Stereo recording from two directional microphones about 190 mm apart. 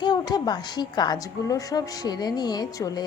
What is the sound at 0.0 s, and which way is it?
A woman's voice, 20° left (ahead or behind).